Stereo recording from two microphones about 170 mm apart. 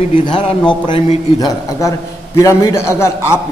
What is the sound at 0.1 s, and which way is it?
A man's voice, 30° left (ahead or behind).